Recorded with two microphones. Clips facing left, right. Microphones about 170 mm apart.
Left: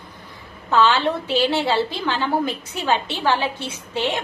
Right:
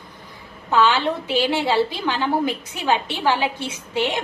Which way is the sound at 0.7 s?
10° right (ahead or behind).